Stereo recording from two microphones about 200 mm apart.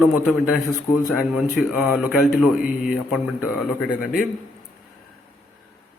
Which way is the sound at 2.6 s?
45° left (ahead or behind).